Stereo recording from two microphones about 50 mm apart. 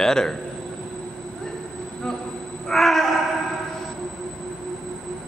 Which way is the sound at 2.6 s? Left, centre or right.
Centre.